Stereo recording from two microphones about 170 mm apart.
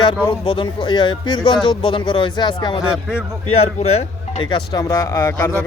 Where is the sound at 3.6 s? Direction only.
35° left (ahead or behind); by 5.6 s 15° left (ahead or behind).